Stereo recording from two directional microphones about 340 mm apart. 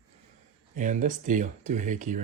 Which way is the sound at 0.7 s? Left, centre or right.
Right.